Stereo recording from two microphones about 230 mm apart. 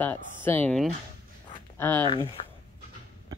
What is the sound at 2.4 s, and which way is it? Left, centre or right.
Dog, left.